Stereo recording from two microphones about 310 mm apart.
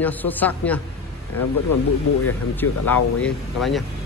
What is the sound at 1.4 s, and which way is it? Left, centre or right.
Speech, left.